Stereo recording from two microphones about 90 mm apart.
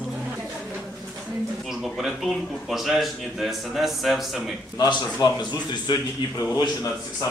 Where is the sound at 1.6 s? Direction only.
Centre (ahead or behind).